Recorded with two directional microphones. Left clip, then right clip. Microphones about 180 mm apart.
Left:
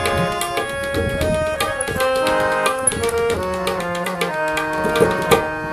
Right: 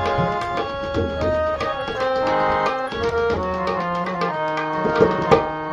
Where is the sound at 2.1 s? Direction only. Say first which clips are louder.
Even; 20° left (ahead or behind).